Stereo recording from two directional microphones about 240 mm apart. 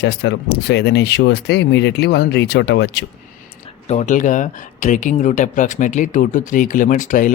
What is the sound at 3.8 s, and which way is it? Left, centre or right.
Speech, left.